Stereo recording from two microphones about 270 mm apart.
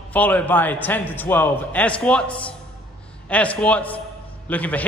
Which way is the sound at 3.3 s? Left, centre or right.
Centre.